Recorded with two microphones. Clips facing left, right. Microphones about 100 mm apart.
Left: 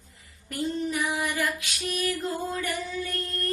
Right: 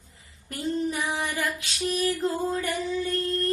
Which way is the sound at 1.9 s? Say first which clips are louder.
Right 3 dB; 25° right (ahead or behind).